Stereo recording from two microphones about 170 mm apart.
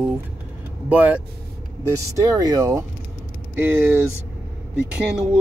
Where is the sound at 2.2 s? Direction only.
20° right (ahead or behind).